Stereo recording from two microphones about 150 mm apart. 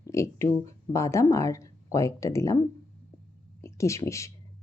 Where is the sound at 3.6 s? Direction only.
20° left (ahead or behind).